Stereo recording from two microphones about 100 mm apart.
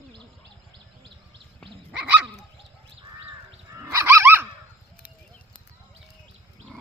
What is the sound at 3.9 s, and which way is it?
Goose, 25° right (ahead or behind).